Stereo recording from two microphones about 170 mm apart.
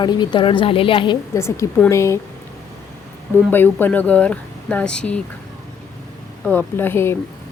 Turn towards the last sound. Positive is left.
turn(degrees=15)  # may be behind; listen again after turning